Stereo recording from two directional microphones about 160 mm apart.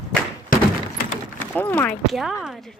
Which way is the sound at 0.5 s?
60° left (ahead or behind).